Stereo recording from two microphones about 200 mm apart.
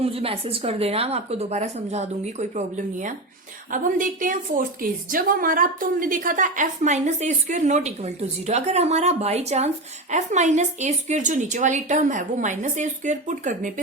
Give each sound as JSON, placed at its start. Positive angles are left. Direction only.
{"t": 0.0, "sound": "a woman's voice", "side_deg": -30}